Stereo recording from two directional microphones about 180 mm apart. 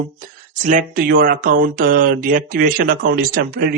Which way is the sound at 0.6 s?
50° right (ahead or behind).